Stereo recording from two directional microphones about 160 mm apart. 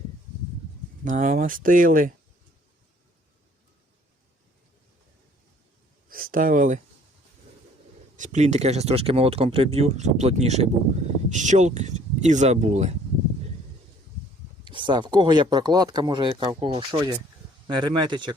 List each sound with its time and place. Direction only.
1.0 s speech: 50° right (ahead or behind)
6.1 s speech: 65° right (ahead or behind)
8.1 s speech: 50° right (ahead or behind)
14.6 s speech: 30° right (ahead or behind)